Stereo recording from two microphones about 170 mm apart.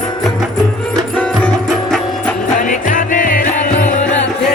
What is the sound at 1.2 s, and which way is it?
Music, 5° left (ahead or behind).